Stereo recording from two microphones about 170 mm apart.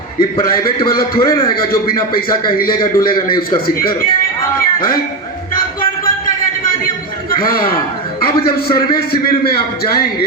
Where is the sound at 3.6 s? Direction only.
60° left (ahead or behind).